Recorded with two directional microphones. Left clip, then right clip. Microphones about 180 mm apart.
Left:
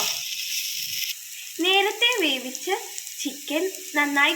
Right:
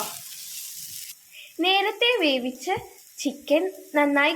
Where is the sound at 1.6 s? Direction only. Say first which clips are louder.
Left 1 dB; 70° right (ahead or behind).